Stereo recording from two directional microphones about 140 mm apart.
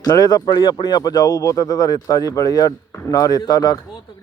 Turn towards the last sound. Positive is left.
turn(degrees=25)  # may be behind; listen again after turning